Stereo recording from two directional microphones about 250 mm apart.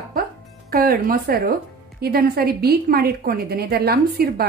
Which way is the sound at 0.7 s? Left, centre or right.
Right.